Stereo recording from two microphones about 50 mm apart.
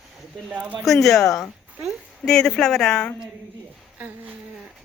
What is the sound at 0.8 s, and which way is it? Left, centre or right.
Speech, centre.